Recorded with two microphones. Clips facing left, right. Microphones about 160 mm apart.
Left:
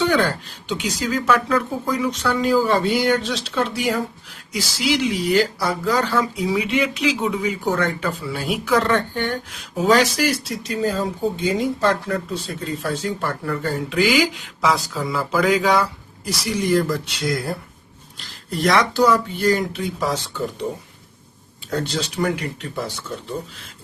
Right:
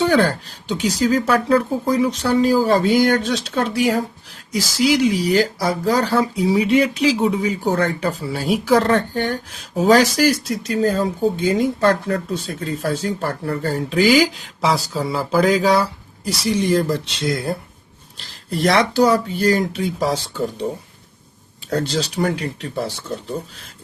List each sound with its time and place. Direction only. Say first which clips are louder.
0.0 s speech: right 3 dB; 35° right (ahead or behind)
5.1 s speech: right 1 dB; 40° right (ahead or behind)
12.8 s speech: right 3 dB; 40° right (ahead or behind)
21.7 s speech: right 3 dB; 40° right (ahead or behind)